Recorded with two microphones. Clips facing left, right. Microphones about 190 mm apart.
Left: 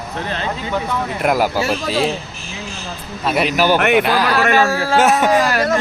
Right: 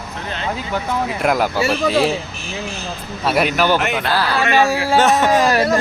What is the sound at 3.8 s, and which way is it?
Speech, 65° left (ahead or behind).